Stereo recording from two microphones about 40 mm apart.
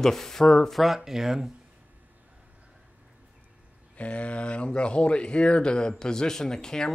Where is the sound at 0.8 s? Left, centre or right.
Centre.